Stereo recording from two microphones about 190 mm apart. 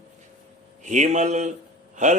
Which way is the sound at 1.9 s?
40° right (ahead or behind).